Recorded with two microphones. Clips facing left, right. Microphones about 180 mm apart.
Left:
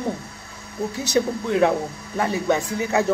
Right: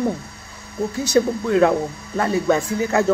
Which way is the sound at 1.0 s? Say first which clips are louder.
Right 4 dB; 20° left (ahead or behind).